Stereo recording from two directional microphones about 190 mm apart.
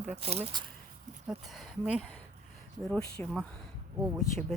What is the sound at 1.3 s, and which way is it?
Speech, centre (ahead or behind).